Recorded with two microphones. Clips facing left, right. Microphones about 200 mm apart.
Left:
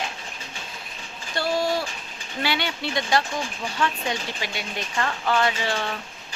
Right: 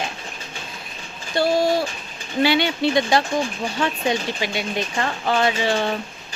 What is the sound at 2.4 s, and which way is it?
Speech, 20° right (ahead or behind).